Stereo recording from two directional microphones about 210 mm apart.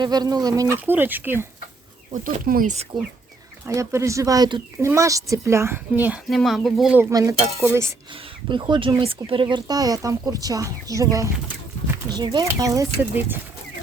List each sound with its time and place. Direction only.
0.0 s speech: 20° right (ahead or behind)
2.1 s speech: 40° right (ahead or behind)
3.7 s speech: 15° right (ahead or behind)
7.0 s speech: 15° right (ahead or behind)